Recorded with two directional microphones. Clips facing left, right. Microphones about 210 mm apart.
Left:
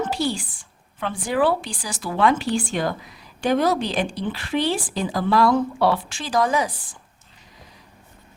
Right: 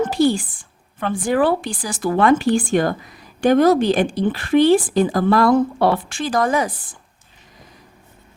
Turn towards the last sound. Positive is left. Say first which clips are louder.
# right 2 dB
turn(degrees=-55)  # may be behind; listen again after turning